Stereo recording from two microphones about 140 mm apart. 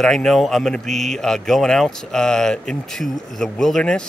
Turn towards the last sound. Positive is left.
turn(degrees=5)  # may be behind; listen again after turning